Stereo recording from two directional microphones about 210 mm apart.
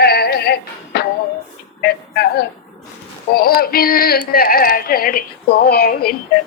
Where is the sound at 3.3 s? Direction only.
45° left (ahead or behind).